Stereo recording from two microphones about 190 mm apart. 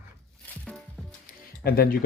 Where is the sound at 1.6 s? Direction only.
55° left (ahead or behind).